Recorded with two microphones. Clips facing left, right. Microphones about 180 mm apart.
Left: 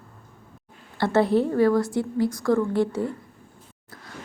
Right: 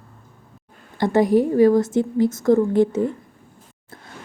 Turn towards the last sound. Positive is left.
turn(degrees=-20)  # may be behind; listen again after turning